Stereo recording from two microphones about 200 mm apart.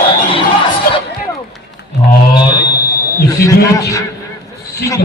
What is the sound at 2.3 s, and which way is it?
Fire alarm, 20° left (ahead or behind).